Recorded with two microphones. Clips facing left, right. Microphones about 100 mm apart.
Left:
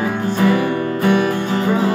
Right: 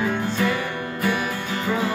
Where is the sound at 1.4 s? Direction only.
30° left (ahead or behind).